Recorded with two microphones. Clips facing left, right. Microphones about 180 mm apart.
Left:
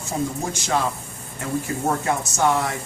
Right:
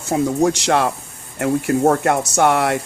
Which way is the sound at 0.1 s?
75° right (ahead or behind).